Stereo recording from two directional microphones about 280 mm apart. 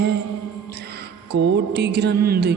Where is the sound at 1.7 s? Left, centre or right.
Right.